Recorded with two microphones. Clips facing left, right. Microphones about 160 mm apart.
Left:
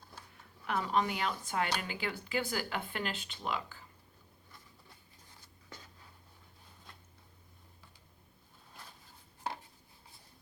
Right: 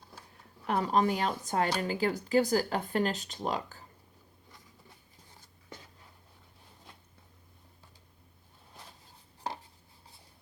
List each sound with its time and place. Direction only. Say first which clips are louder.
0.7 s speech: right 5 dB; 35° right (ahead or behind)